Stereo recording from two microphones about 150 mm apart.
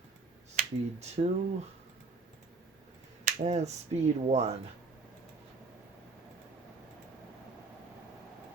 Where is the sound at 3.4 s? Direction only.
50° right (ahead or behind).